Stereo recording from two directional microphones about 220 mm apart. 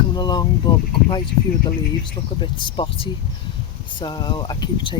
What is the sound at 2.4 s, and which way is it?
Speech, 20° left (ahead or behind).